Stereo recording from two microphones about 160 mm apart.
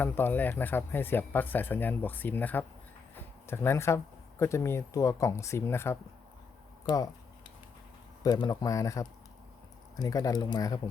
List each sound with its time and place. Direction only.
0.0 s speech: 10° left (ahead or behind)
8.2 s speech: 25° left (ahead or behind)